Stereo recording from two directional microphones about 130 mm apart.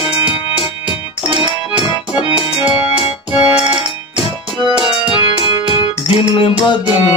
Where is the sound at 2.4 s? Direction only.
45° left (ahead or behind).